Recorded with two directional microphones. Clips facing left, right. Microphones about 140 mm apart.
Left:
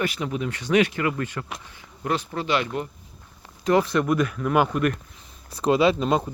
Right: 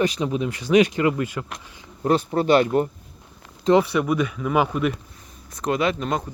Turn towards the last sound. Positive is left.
turn(degrees=25)  # may be behind; listen again after turning